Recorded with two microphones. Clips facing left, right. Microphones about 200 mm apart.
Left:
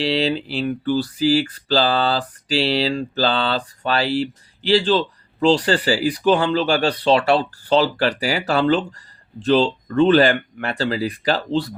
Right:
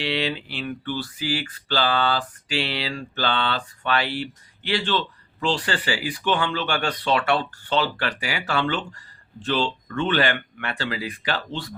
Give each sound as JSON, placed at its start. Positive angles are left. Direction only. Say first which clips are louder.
{"t": 0.0, "sound": "speech", "louder": "left 6 dB", "side_deg": 35}